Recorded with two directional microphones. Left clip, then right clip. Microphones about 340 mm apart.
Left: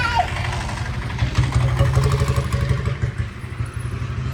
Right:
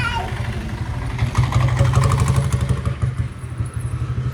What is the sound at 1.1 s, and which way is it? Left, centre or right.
Vehicle, centre.